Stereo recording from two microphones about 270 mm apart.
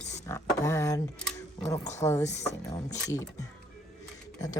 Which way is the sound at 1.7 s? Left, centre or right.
Left.